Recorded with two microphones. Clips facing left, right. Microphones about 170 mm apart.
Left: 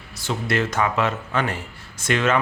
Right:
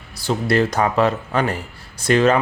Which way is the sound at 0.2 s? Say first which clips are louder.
Right 5 dB; 35° right (ahead or behind).